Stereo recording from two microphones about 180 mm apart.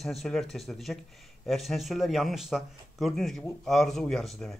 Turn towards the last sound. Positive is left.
turn(degrees=5)  # may be behind; listen again after turning